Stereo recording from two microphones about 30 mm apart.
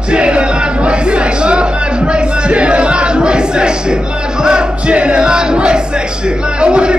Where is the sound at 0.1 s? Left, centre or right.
Right.